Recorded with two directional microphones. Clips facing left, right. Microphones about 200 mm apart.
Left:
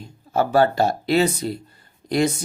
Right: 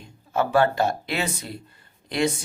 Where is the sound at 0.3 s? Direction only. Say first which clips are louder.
Left 3 dB; 35° left (ahead or behind).